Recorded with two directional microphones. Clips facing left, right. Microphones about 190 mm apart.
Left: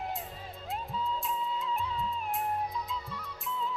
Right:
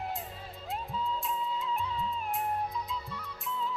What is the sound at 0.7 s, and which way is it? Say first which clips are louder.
Music: even; centre (ahead or behind).